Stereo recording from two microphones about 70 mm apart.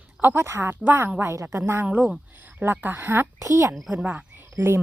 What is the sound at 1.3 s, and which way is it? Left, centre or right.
Speech, right.